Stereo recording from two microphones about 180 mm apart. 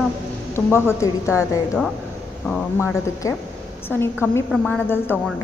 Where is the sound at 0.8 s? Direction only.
15° left (ahead or behind).